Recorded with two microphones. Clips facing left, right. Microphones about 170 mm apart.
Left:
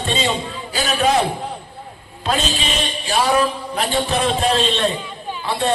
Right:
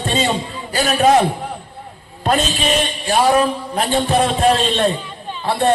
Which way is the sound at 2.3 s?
50° right (ahead or behind).